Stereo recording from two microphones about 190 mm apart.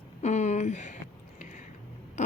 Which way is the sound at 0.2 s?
40° left (ahead or behind).